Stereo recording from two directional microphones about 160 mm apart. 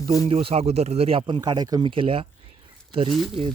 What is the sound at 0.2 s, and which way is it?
Speech, 40° right (ahead or behind).